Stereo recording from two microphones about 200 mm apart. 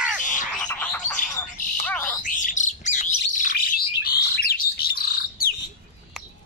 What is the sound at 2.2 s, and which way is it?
Bird, 40° left (ahead or behind).